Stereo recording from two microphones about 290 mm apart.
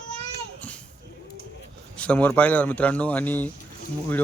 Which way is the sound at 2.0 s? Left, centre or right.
Centre.